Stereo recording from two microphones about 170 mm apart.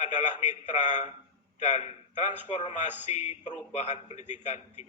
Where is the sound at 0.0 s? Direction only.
45° left (ahead or behind).